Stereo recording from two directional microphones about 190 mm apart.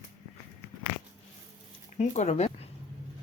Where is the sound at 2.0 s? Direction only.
40° left (ahead or behind).